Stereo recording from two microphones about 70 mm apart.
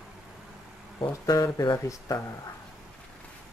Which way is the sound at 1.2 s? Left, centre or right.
Left.